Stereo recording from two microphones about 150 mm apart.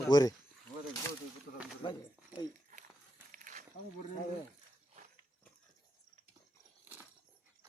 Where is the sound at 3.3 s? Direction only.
60° right (ahead or behind).